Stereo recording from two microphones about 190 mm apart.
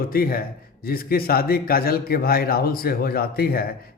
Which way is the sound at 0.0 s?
50° left (ahead or behind).